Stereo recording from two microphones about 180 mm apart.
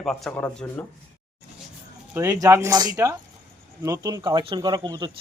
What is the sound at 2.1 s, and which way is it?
Speech, 15° right (ahead or behind).